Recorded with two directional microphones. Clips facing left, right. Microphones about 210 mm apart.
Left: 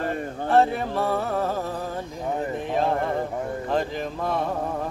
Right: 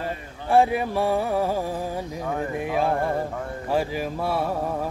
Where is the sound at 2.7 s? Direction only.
10° right (ahead or behind).